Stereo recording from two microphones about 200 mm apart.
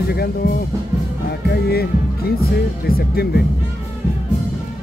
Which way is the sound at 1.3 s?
55° left (ahead or behind).